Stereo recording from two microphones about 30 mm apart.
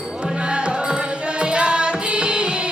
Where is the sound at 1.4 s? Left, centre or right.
Right.